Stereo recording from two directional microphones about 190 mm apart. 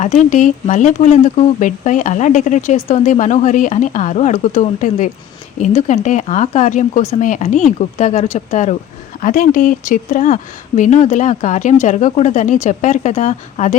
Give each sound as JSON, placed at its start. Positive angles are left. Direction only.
{"t": 0.0, "sound": "speech", "side_deg": 40}